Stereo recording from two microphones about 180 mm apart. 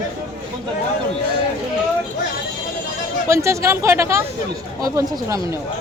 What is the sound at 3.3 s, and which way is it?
A woman's voice, 15° right (ahead or behind).